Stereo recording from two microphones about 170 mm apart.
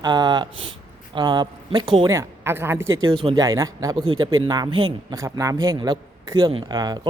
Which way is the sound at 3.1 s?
30° right (ahead or behind).